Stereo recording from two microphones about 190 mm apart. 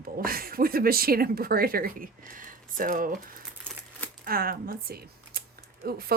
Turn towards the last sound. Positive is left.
turn(degrees=-50)  # may be behind; listen again after turning